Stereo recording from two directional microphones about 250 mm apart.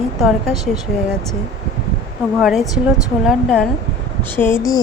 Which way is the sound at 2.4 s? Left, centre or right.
Centre.